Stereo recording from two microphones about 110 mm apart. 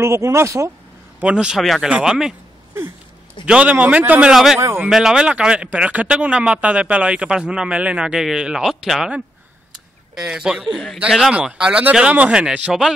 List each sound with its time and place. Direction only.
0.0 s speech: 25° right (ahead or behind)
1.2 s a man's voice: 5° right (ahead or behind)
3.4 s speech: 10° right (ahead or behind)
4.3 s a man's voice: 5° right (ahead or behind)
10.1 s a man's voice: 5° right (ahead or behind)